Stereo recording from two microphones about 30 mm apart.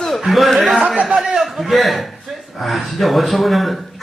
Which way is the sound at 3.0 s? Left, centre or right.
Centre.